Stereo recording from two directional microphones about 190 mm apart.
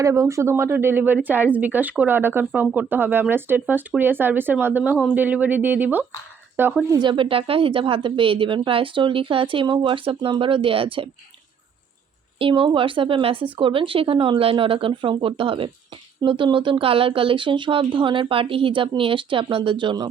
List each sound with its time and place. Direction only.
0.0 s speech: 15° right (ahead or behind)
7.0 s a woman's voice: 25° right (ahead or behind)
12.4 s a woman's voice: 25° right (ahead or behind)